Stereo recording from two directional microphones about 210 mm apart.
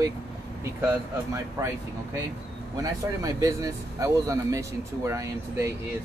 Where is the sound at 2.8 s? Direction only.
15° right (ahead or behind).